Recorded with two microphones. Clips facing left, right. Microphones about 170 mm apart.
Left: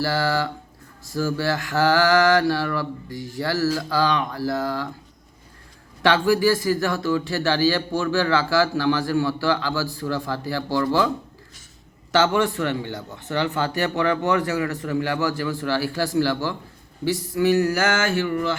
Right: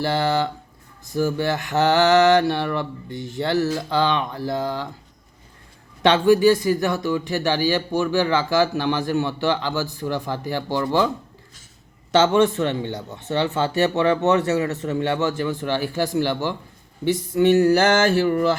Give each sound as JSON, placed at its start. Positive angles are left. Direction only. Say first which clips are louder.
{"t": 0.0, "sound": "speech", "louder": "right 2 dB", "side_deg": -20}
{"t": 6.0, "sound": "speech", "louder": "right 3 dB", "side_deg": -20}
{"t": 12.1, "sound": "speech", "louder": "right 3 dB", "side_deg": -20}
{"t": 17.1, "sound": "a sound", "louder": "right 3 dB", "side_deg": -25}